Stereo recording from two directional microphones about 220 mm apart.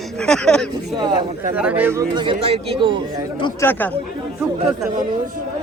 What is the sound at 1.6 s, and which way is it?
Speech, 5° right (ahead or behind).